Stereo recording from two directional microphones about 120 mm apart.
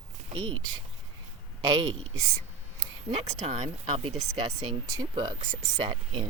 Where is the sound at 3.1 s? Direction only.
70° right (ahead or behind); by 3.7 s 85° right.